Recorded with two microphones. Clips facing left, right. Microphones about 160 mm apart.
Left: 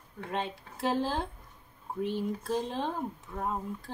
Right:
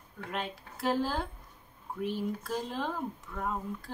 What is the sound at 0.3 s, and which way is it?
Speech, 25° left (ahead or behind).